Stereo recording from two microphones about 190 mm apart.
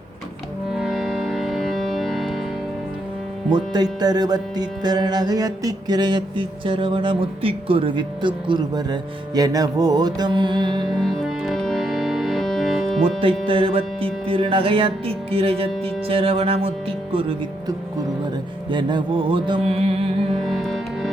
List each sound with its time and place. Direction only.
0.8 s music: centre (ahead or behind)
3.5 s music: 20° right (ahead or behind)
10.8 s music: centre (ahead or behind)
13.1 s music: 30° right (ahead or behind)
20.5 s music: centre (ahead or behind)